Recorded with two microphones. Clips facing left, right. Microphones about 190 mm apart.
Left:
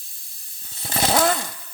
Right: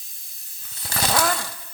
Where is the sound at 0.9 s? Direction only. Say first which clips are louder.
Left 4 dB; 25° left (ahead or behind).